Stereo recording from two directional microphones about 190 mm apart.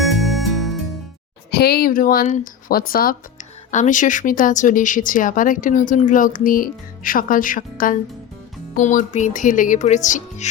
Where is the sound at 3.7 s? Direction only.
40° left (ahead or behind).